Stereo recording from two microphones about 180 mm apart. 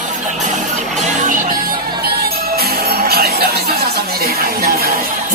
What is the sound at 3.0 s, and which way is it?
Music, 60° right (ahead or behind).